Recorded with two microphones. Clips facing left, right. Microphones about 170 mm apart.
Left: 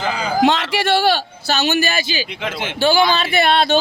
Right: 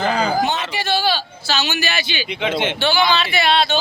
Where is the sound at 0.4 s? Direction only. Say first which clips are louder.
Left 6 dB; 85° left; by 1.2 s 70° left (ahead or behind).